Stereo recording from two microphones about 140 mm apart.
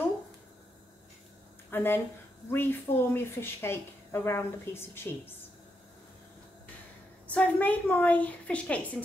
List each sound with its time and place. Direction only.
1.7 s a woman's voice: 15° left (ahead or behind)
7.2 s a woman's voice: 10° left (ahead or behind)